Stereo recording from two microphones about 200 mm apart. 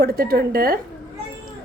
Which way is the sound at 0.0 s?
45° right (ahead or behind).